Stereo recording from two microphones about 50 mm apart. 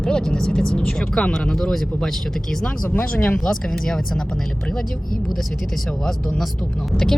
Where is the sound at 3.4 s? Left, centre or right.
Centre.